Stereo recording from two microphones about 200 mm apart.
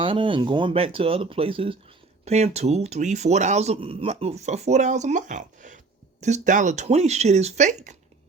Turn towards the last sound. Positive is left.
turn(degrees=-35)  # may be behind; listen again after turning